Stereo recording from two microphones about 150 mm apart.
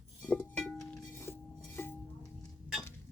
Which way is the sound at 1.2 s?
15° left (ahead or behind).